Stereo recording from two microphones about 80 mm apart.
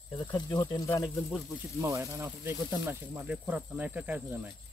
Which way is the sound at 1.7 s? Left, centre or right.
Right.